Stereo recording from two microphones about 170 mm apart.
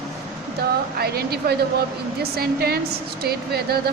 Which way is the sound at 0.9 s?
65° right (ahead or behind).